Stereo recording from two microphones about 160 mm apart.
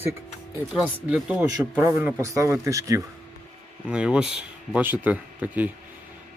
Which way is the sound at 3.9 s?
5° right (ahead or behind).